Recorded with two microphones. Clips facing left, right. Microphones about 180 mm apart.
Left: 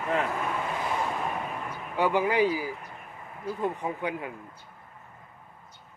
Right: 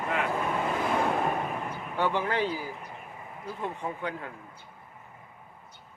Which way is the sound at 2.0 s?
10° left (ahead or behind).